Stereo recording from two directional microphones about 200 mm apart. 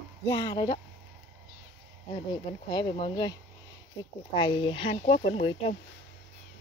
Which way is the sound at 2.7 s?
25° left (ahead or behind).